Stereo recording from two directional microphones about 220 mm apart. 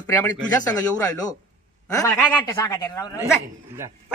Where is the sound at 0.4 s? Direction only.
15° left (ahead or behind).